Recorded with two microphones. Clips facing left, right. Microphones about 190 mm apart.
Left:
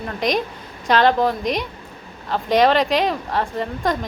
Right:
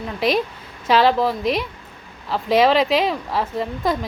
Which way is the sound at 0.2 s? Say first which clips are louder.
Right 2 dB; 5° right (ahead or behind).